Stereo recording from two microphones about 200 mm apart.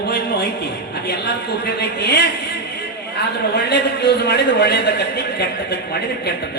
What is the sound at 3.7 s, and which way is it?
Speech, 55° left (ahead or behind).